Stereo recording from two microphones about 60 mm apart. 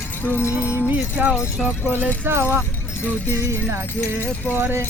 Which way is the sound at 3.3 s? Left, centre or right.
Right.